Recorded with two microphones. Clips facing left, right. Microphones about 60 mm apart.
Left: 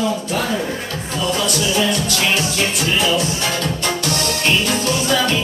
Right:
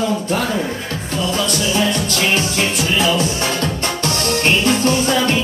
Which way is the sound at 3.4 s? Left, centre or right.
Right.